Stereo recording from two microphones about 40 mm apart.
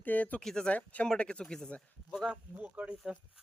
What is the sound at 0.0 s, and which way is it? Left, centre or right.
Speech, left.